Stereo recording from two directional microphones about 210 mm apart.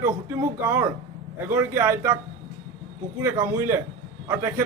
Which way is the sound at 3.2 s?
10° right (ahead or behind).